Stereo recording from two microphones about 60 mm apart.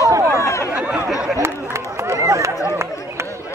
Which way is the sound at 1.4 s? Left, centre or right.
Right.